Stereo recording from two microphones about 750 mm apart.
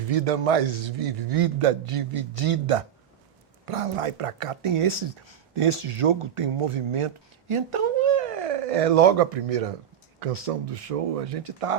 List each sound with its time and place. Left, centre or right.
0.1 s a man's voice: right